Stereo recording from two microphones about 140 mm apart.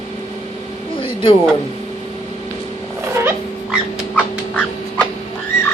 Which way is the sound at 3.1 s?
20° right (ahead or behind).